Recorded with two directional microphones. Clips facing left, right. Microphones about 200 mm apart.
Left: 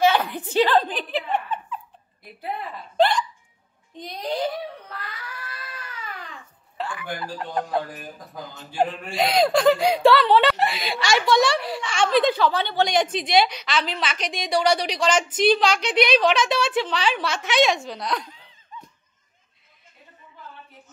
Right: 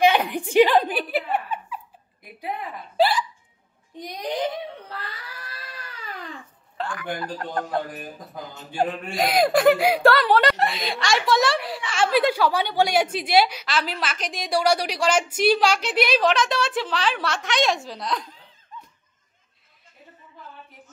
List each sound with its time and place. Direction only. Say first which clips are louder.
0.0 s giggle: right 1 dB; 15° right (ahead or behind)
3.0 s hiccup: left 1 dB; 5° right (ahead or behind)
3.9 s music: left 1 dB; 15° right (ahead or behind)
5.5 s cat: left 1 dB; 35° right (ahead or behind)
6.8 s speech: right 1 dB; 5° left (ahead or behind)
8.7 s speech: left 1 dB; centre (ahead or behind)